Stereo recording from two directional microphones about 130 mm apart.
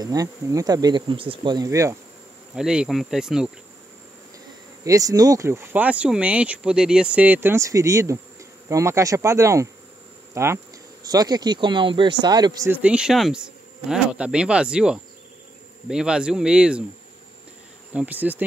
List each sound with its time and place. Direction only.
0.0 s speech: 30° right (ahead or behind)
2.5 s insect: 5° right (ahead or behind)
4.8 s speech: 25° right (ahead or behind)
12.6 s speech: 15° right (ahead or behind)
17.9 s speech: 10° right (ahead or behind)